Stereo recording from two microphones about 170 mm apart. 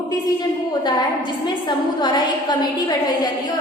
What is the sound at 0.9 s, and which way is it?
A woman's voice, 25° left (ahead or behind).